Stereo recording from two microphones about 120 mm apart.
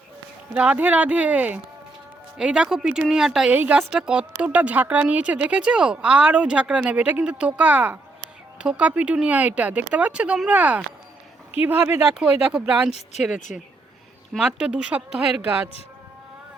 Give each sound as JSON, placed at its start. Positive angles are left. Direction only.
{"t": 0.5, "sound": "speech", "side_deg": -10}